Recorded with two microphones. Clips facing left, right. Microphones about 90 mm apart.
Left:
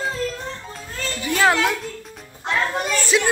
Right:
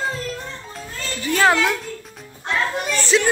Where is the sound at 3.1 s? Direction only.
5° left (ahead or behind).